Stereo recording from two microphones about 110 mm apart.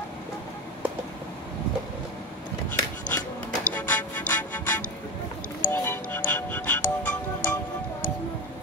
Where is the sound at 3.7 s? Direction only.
15° left (ahead or behind).